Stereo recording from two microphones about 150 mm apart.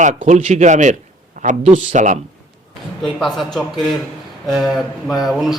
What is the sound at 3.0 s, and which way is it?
A man's voice, centre (ahead or behind).